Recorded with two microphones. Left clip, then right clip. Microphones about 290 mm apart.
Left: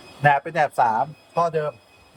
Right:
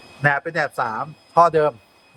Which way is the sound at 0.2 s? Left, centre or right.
Centre.